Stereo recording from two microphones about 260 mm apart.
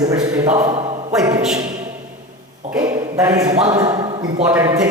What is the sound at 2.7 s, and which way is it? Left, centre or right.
A man's voice, centre.